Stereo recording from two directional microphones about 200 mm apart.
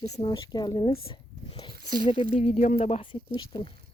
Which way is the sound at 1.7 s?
50° right (ahead or behind).